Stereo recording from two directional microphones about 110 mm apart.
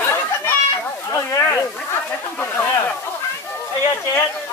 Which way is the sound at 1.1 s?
30° left (ahead or behind).